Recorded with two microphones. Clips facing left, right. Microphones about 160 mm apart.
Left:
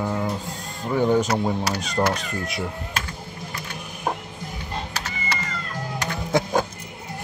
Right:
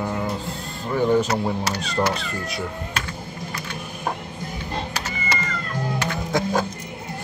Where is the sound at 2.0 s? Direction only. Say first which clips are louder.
Even; 10° left (ahead or behind).